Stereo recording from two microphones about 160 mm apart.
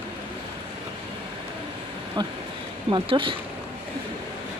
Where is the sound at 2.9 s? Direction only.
30° right (ahead or behind).